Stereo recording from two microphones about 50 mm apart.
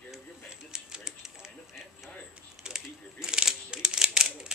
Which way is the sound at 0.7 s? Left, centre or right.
Centre.